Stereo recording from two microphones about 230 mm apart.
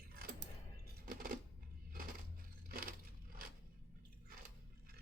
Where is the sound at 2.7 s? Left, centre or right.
Right.